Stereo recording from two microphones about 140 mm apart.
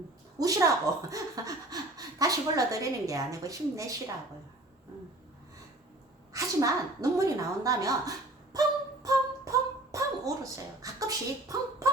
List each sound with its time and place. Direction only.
0.3 s speech: 25° right (ahead or behind)
6.3 s speech: 25° right (ahead or behind)
9.0 s a sound: 25° right (ahead or behind)